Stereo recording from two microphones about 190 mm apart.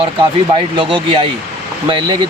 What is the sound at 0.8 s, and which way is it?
Speech, 25° right (ahead or behind).